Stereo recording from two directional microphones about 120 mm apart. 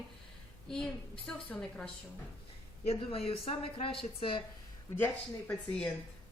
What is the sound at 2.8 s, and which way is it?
Speech, 55° left (ahead or behind).